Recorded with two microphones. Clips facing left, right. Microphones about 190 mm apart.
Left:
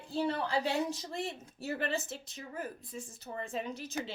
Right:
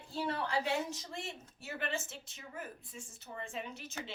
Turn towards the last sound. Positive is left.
turn(degrees=35)  # may be behind; listen again after turning